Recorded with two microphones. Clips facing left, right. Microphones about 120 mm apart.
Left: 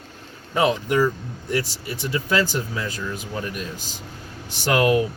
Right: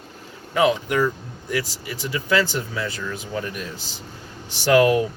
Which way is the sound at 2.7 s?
15° left (ahead or behind).